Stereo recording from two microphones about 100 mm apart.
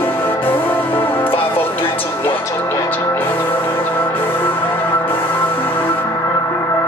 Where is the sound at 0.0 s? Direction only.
20° left (ahead or behind).